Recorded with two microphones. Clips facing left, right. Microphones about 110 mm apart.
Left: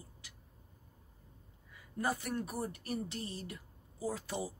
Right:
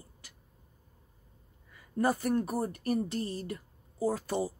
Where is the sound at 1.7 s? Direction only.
45° right (ahead or behind).